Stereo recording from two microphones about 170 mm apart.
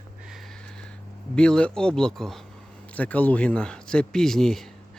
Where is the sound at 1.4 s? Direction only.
5° left (ahead or behind).